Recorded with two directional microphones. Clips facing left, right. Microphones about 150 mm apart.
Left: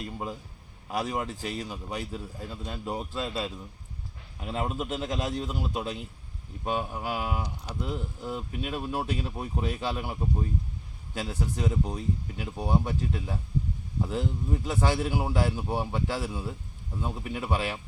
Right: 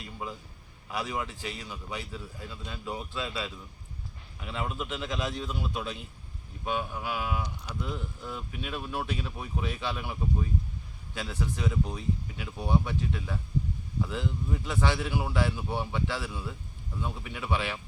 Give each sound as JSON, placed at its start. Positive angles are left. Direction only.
{"t": 0.0, "sound": "a man's voice", "side_deg": 45}